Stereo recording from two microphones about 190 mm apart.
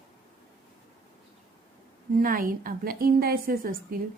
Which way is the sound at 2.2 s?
45° right (ahead or behind).